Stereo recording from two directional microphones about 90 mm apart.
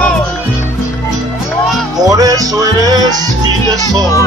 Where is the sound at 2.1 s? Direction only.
40° right (ahead or behind).